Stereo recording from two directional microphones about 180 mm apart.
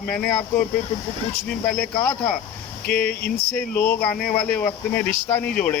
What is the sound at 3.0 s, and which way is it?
Speech, 60° left (ahead or behind).